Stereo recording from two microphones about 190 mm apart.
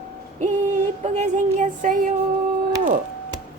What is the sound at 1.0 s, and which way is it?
Speech, 35° right (ahead or behind).